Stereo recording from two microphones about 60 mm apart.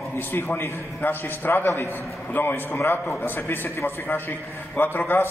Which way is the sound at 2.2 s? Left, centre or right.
Left.